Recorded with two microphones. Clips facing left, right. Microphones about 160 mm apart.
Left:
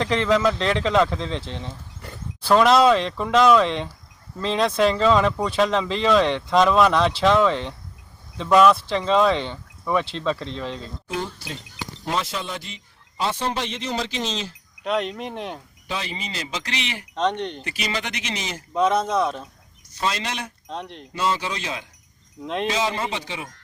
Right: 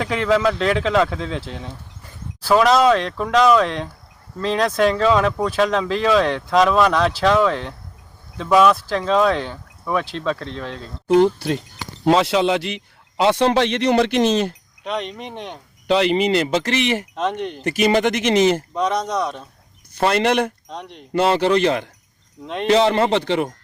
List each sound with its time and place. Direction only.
0.0 s speech: 5° right (ahead or behind)
2.0 s a sound: 75° left (ahead or behind)
2.4 s speech: centre (ahead or behind)
11.1 s speech: 65° right (ahead or behind)
12.0 s a man's voice: 75° right (ahead or behind)
14.8 s speech: centre (ahead or behind)
15.9 s speech: 70° right (ahead or behind); by 17.1 s 50° right (ahead or behind)
17.2 s speech: 5° right (ahead or behind)
17.6 s speech: 50° right (ahead or behind)
18.7 s speech: centre (ahead or behind)
19.9 s speech: 60° right (ahead or behind)
20.7 s speech: centre (ahead or behind)
21.1 s speech: 65° right (ahead or behind)